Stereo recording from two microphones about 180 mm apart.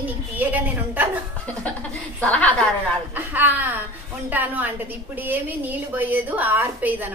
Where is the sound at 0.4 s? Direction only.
10° right (ahead or behind).